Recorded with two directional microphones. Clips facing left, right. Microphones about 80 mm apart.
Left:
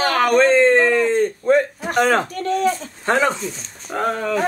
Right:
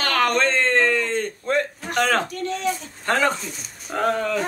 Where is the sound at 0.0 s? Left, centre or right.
Centre.